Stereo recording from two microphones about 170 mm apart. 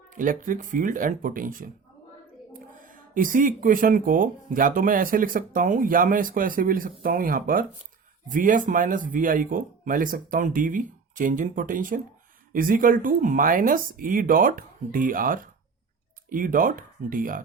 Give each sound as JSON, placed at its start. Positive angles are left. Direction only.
{"t": 0.1, "sound": "speech", "side_deg": -50}